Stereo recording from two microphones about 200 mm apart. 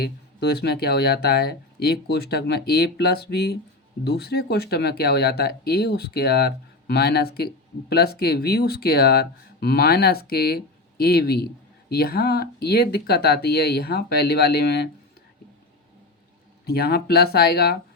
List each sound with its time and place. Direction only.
0.0 s speech: 55° left (ahead or behind)
16.6 s speech: 50° left (ahead or behind)